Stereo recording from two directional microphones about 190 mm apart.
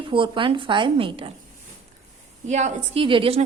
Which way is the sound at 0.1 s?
25° right (ahead or behind).